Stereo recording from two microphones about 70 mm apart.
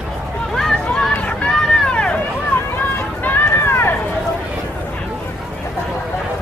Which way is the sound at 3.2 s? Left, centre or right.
Left.